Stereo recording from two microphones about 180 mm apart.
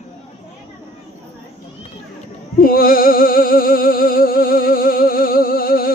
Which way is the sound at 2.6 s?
55° left (ahead or behind).